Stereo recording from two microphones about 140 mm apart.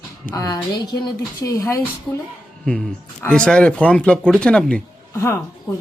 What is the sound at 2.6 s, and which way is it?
Speech, 5° left (ahead or behind).